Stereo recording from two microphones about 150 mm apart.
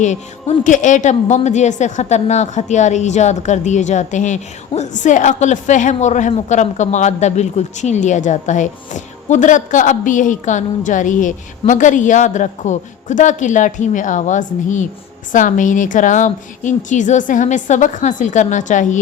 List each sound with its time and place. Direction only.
0.0 s a woman's voice: 55° left (ahead or behind)